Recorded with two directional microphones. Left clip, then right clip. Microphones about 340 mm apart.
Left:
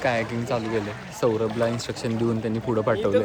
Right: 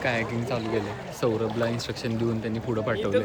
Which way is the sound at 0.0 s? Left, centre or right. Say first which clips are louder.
Left 3 dB; centre.